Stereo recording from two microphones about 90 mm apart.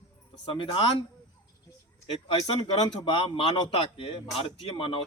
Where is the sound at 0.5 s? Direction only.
80° left.